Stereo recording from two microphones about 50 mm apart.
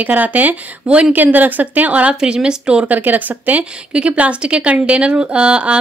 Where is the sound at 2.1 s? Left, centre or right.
Centre.